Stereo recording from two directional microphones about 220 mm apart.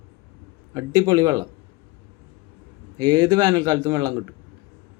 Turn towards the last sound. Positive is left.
turn(degrees=-15)  # may be behind; listen again after turning